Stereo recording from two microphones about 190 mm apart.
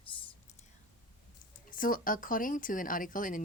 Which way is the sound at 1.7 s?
45° left (ahead or behind).